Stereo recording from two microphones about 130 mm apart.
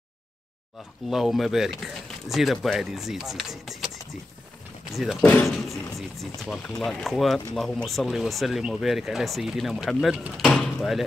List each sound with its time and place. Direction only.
1.1 s speech: centre (ahead or behind)
5.2 s speech: 15° left (ahead or behind)
5.7 s speech: centre (ahead or behind)